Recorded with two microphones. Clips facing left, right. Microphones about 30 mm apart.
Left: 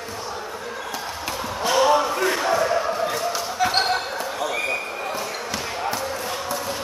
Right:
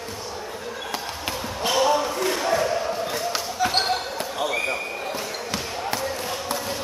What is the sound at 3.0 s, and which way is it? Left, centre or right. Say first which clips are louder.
Basketball bounce: left 2 dB; centre.